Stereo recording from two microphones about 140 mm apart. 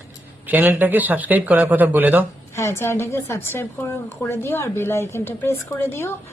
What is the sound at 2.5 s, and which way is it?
A woman's voice, 20° left (ahead or behind).